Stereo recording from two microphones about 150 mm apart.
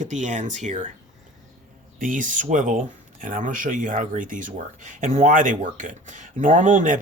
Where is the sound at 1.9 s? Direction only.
60° right (ahead or behind).